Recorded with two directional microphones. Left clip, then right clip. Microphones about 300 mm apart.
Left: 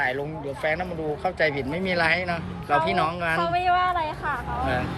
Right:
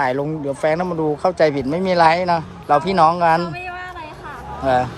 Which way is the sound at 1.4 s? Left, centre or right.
Centre.